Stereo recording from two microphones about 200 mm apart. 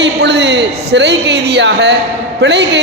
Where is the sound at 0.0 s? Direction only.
60° right (ahead or behind).